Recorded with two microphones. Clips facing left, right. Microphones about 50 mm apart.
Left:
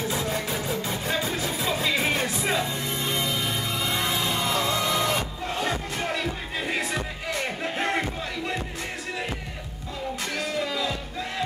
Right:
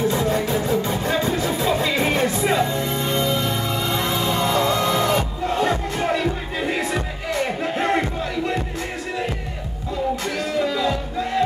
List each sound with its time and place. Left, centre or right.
0.0 s music: centre
10.3 s music: centre